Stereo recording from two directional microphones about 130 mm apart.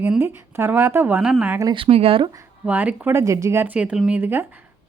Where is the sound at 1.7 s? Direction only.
45° right (ahead or behind).